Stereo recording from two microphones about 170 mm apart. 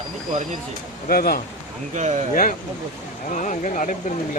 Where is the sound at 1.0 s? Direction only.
60° left (ahead or behind).